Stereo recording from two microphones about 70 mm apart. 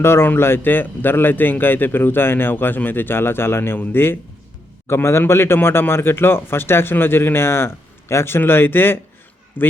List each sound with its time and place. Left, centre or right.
0.0 s speech: left